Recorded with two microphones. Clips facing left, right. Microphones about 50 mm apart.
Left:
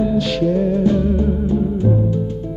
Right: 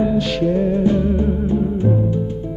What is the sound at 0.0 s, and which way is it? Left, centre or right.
Music, right.